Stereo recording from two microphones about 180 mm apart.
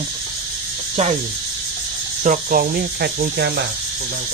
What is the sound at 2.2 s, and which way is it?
Speech, 50° right (ahead or behind).